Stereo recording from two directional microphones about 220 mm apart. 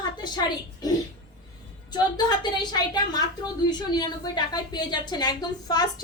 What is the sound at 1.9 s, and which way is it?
A woman's voice, 20° left (ahead or behind).